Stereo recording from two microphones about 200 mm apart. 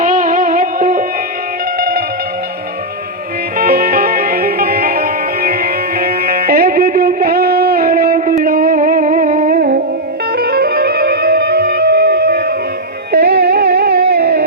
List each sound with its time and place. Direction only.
0.0 s music: 40° right (ahead or behind)
3.6 s music: 45° right (ahead or behind)